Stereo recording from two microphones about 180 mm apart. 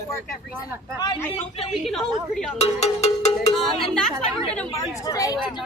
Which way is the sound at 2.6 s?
35° left (ahead or behind).